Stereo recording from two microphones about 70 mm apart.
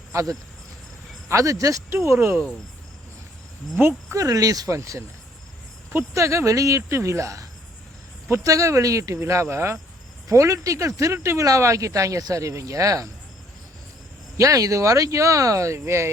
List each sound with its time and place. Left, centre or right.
0.1 s speech: right
3.8 s speech: right
4.1 s speech: right
6.1 s speech: right
8.4 s speech: right
14.3 s speech: right